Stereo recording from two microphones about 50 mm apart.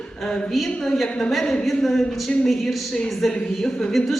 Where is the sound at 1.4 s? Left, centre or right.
Centre.